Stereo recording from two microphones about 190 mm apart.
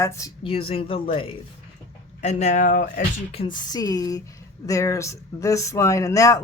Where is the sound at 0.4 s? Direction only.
30° left (ahead or behind); by 3.0 s 45° left (ahead or behind).